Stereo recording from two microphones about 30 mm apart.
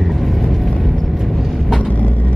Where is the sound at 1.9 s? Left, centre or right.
Left.